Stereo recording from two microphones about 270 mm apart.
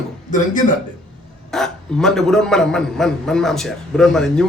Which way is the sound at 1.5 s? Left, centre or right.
Centre.